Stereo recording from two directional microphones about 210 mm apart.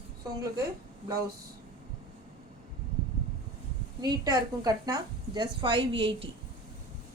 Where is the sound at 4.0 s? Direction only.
15° right (ahead or behind).